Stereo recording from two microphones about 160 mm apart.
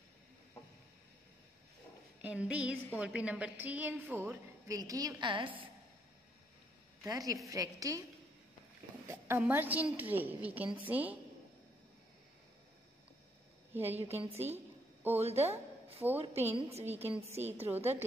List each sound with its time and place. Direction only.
2.2 s a woman's voice: 10° right (ahead or behind); by 5.7 s 30° right (ahead or behind)
7.0 s a woman's voice: 20° right (ahead or behind)
9.0 s a sound: 20° right (ahead or behind)
9.4 s a woman's voice: 10° right (ahead or behind)
13.7 s a woman's voice: 40° right (ahead or behind)
15.1 s a woman's voice: 40° right (ahead or behind)
16.8 s a woman's voice: 10° right (ahead or behind)